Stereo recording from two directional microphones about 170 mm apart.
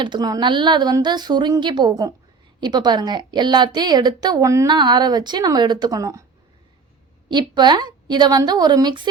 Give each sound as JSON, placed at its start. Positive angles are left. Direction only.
{"t": 0.0, "sound": "a woman's voice", "side_deg": -25}
{"t": 7.3, "sound": "a woman's voice", "side_deg": -25}